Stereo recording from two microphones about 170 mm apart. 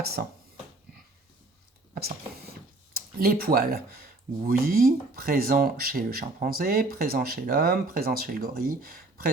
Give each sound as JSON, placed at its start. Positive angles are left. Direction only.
{"t": 0.0, "sound": "speech", "side_deg": -65}
{"t": 2.9, "sound": "speech", "side_deg": -65}